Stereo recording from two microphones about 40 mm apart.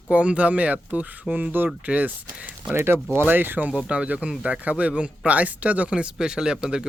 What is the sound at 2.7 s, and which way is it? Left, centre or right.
Speech, right.